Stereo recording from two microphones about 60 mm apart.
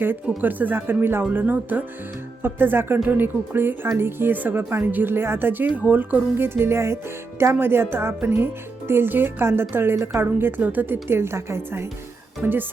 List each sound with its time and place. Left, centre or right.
0.4 s speech: right
12.4 s speech: right